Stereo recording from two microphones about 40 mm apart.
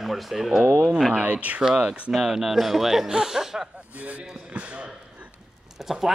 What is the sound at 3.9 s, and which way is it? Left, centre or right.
Speech, right.